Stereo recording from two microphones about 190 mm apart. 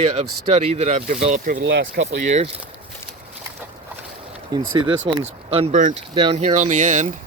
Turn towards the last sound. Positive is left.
turn(degrees=-40)  # may be behind; listen again after turning